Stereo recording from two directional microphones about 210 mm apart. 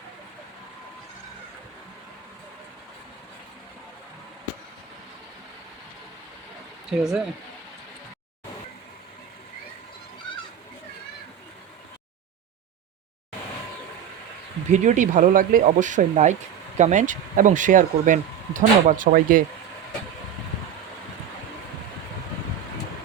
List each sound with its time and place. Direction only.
6.9 s speech: 5° right (ahead or behind)
14.7 s speech: 35° right (ahead or behind)